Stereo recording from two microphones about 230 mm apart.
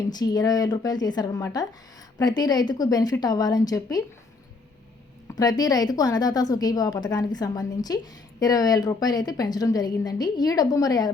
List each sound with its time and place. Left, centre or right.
0.1 s a woman's voice: centre
5.3 s a woman's voice: centre